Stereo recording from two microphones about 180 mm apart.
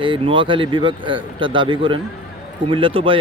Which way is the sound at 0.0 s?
30° right (ahead or behind).